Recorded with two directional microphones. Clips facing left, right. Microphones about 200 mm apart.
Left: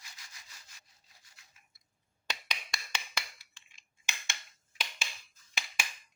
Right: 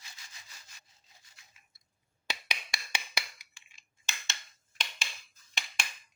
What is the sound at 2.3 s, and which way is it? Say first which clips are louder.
Finger snapping: right 1 dB; 10° right (ahead or behind).